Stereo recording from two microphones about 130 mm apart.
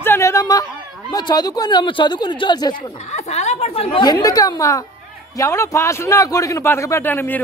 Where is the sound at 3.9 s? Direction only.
30° left (ahead or behind).